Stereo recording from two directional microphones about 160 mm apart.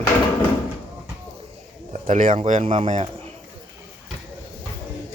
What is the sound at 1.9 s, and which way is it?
Speech, 50° right (ahead or behind).